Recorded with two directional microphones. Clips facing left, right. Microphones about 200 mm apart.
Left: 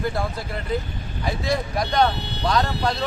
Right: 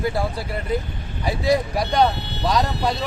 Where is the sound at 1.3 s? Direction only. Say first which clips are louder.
Right 5 dB; 35° right (ahead or behind).